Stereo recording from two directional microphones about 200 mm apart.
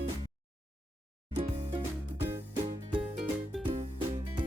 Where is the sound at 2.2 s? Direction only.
15° right (ahead or behind).